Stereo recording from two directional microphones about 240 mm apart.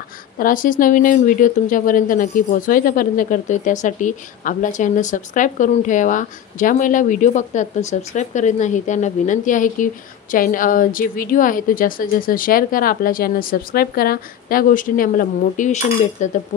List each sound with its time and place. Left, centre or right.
0.4 s a woman's voice: left